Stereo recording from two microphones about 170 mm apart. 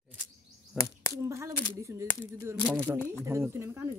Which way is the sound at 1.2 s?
15° right (ahead or behind).